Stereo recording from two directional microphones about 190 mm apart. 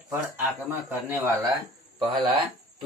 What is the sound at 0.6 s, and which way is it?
Speech, 10° right (ahead or behind).